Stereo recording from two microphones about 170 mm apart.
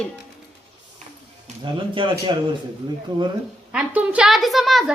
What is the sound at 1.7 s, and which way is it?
Speech, 30° right (ahead or behind).